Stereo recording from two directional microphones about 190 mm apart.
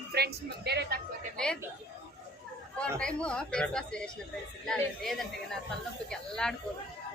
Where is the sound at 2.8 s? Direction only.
5° left (ahead or behind).